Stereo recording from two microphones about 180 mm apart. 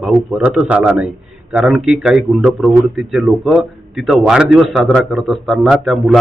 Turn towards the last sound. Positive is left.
turn(degrees=0)  # may be behind; listen again after turning